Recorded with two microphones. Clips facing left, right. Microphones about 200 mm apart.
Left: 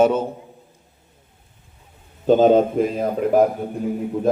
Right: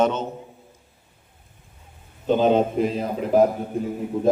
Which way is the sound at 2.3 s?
45° left (ahead or behind).